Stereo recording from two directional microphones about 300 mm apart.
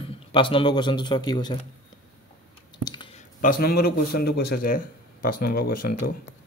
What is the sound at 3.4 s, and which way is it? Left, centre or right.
Speech, left.